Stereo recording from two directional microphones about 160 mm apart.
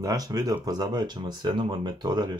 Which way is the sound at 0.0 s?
20° right (ahead or behind).